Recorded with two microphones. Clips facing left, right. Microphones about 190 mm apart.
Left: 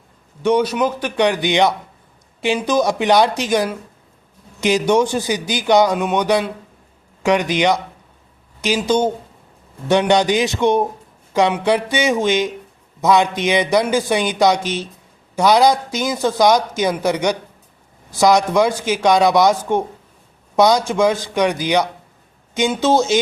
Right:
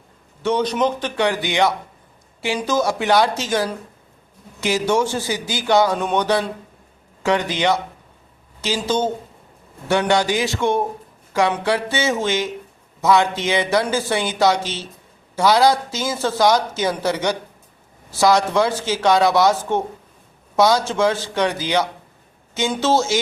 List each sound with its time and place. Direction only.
0.4 s a man's voice: 10° left (ahead or behind)